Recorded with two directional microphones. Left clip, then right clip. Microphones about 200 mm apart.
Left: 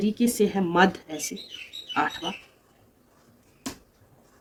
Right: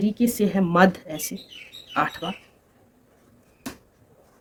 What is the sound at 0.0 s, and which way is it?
Speech, 55° right (ahead or behind).